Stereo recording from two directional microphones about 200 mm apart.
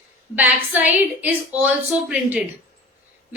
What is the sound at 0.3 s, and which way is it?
A woman's voice, 10° right (ahead or behind).